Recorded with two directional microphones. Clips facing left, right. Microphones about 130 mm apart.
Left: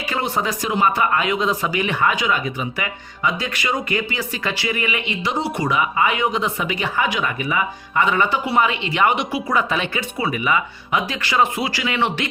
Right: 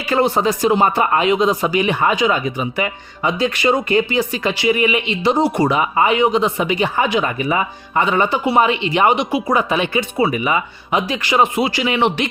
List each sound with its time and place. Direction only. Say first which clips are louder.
0.1 s speech: right 8 dB; 30° right (ahead or behind)